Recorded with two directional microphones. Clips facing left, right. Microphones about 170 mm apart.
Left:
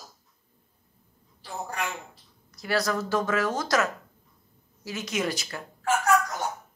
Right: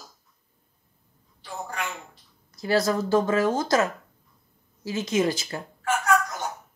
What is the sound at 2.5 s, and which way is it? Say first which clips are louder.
Speech: right 4 dB; 25° right (ahead or behind).